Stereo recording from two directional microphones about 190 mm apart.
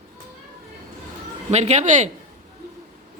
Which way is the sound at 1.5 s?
35° right (ahead or behind).